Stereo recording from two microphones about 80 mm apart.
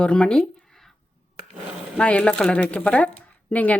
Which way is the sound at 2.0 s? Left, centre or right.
Centre.